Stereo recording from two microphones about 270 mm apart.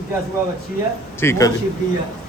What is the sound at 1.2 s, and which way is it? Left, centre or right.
Speech, centre.